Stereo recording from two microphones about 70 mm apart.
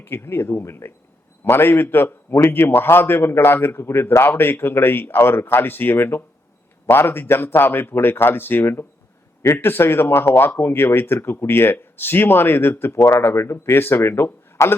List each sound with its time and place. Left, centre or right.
0.0 s a man's voice: left